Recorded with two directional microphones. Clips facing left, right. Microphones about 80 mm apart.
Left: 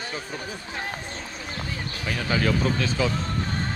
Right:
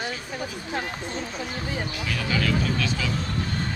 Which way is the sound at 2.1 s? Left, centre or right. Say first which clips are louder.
Left 2 dB; left.